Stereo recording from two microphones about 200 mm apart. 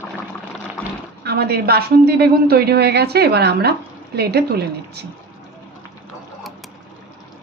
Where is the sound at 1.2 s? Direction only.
55° right (ahead or behind).